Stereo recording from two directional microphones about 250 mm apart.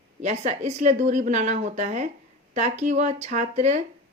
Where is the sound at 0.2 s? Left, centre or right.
Right.